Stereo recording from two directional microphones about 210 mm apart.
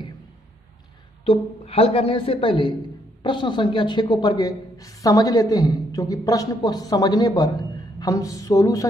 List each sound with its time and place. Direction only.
1.2 s a woman's voice: 25° left (ahead or behind)